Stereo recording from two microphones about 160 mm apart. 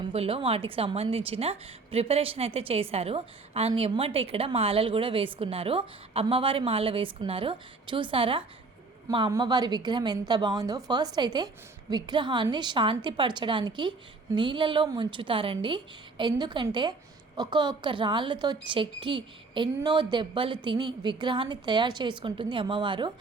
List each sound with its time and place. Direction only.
0.0 s a woman's voice: 35° right (ahead or behind)